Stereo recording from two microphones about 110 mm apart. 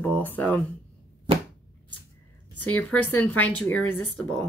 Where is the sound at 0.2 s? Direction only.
15° left (ahead or behind).